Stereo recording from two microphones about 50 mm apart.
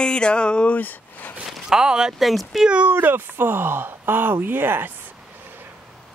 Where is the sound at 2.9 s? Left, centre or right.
Right.